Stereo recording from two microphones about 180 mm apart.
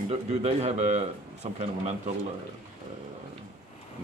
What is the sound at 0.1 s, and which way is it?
A man's voice, 35° right (ahead or behind).